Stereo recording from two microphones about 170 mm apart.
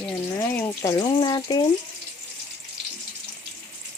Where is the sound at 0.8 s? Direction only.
25° left (ahead or behind).